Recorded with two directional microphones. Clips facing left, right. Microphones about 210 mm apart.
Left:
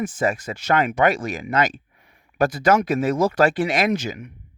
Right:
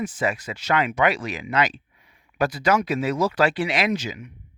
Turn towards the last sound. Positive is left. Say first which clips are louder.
# left 3 dB
turn(degrees=50)  # may be behind; listen again after turning